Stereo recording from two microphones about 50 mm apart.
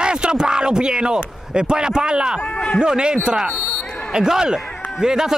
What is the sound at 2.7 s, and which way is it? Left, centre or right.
Speech, centre.